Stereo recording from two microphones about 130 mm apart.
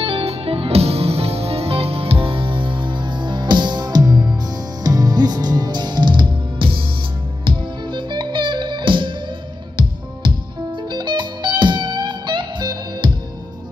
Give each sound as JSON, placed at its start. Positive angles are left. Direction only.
{"t": 0.0, "sound": "music", "side_deg": -50}